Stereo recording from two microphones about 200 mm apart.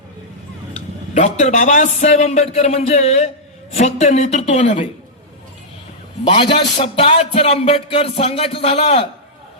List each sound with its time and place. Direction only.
1.1 s a man's voice: 35° left (ahead or behind)
6.2 s a man's voice: 25° left (ahead or behind)